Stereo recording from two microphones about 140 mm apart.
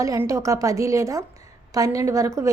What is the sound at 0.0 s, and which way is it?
A woman's voice, 25° right (ahead or behind).